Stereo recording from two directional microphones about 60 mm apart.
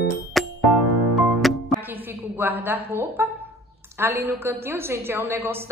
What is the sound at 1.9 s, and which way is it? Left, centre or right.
A woman's voice, right.